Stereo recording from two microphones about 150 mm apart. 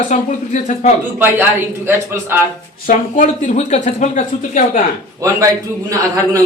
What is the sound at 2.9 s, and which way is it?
Speech, 65° left (ahead or behind).